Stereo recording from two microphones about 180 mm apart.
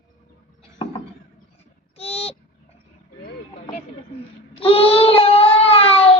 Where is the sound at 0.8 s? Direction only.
25° left (ahead or behind).